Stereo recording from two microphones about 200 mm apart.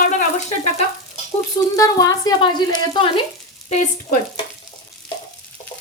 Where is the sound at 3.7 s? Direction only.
35° left (ahead or behind).